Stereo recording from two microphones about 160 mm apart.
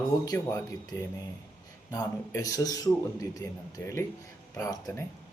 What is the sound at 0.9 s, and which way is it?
A man's voice, 20° left (ahead or behind).